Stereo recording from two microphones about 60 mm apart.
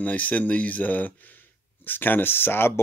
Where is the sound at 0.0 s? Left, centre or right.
Left.